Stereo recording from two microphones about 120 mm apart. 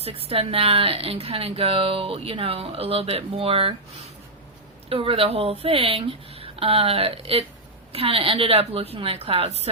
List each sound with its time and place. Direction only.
0.0 s a woman's voice: 55° right (ahead or behind)
4.9 s a woman's voice: 50° right (ahead or behind)